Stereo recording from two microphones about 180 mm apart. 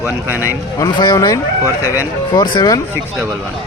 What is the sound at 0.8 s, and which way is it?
Speech, 20° left (ahead or behind).